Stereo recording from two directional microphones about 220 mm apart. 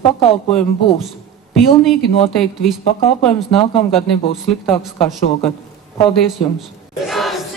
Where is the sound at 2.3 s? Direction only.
Centre (ahead or behind).